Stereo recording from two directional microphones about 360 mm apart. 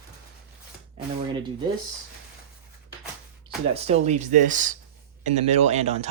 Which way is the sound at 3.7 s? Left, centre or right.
Centre.